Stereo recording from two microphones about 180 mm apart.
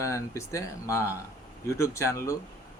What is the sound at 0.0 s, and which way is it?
Speech, 15° left (ahead or behind).